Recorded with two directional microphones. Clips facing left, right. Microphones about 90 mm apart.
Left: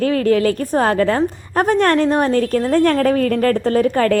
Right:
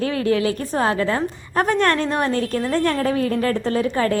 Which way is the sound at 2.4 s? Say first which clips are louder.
Left 5 dB; 45° left (ahead or behind).